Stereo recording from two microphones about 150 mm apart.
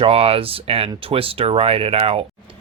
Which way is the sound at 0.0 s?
40° right (ahead or behind).